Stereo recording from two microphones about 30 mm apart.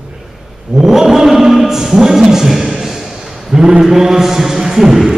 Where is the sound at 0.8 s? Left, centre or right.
Centre.